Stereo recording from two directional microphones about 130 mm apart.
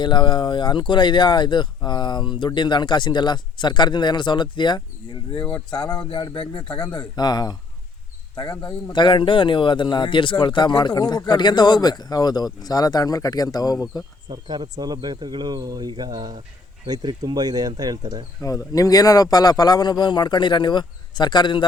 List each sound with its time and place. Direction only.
0.0 s speech: 35° left (ahead or behind)
5.4 s speech: 10° left (ahead or behind)
5.7 s speech: 35° left (ahead or behind)
14.3 s speech: 35° right (ahead or behind)
18.4 s speech: 25° left (ahead or behind)